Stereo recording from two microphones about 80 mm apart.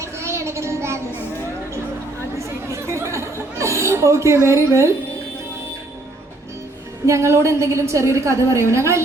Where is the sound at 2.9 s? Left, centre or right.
Right.